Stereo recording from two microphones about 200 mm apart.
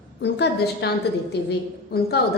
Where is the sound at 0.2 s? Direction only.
55° left (ahead or behind).